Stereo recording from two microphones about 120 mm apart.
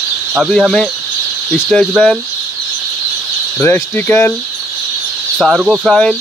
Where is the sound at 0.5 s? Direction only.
5° left (ahead or behind).